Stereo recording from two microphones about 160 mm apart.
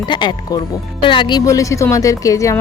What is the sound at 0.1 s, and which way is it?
Speech, 25° left (ahead or behind).